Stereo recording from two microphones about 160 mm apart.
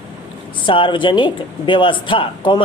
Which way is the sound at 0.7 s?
30° left (ahead or behind).